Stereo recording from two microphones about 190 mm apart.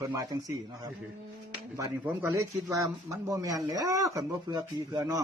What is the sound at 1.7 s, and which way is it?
A man's voice, 15° right (ahead or behind).